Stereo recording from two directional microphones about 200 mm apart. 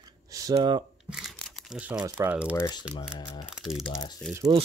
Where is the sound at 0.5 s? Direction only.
25° right (ahead or behind).